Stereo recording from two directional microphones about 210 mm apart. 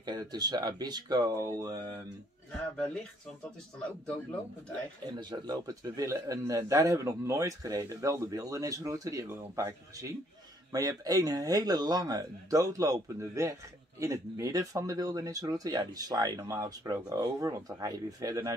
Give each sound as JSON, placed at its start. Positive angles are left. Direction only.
{"t": 0.0, "sound": "speech", "side_deg": -20}
{"t": 5.0, "sound": "speech", "side_deg": -20}